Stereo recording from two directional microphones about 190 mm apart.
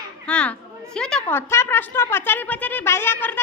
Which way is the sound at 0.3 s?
5° left (ahead or behind).